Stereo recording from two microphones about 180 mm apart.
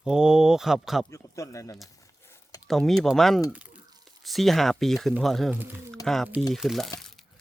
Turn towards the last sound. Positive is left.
turn(degrees=0)  # may be behind; listen again after turning